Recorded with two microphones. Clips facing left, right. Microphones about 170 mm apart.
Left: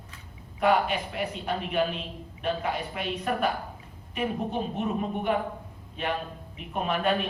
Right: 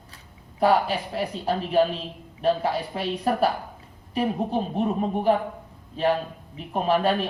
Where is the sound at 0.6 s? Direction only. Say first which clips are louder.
Right 3 dB; 35° right (ahead or behind).